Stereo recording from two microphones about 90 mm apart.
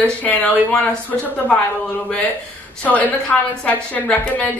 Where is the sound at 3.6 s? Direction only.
15° left (ahead or behind).